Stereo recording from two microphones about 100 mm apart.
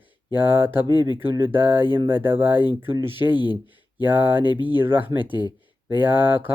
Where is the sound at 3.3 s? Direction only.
50° left (ahead or behind).